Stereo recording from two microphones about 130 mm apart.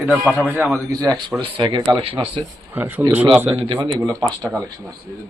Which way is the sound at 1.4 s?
40° right (ahead or behind).